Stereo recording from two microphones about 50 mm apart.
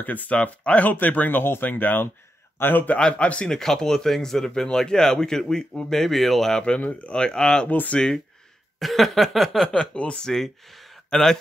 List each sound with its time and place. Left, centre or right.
0.0 s speech: left
3.0 s speech: left
3.4 s speech: centre
6.8 s speech: left; by 7.6 s centre
7.6 s speech: left
8.7 s a sound: centre
9.9 s speech: left
10.2 s speech: centre